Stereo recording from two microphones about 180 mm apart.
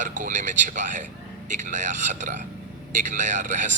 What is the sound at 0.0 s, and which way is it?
Speech, 45° right (ahead or behind).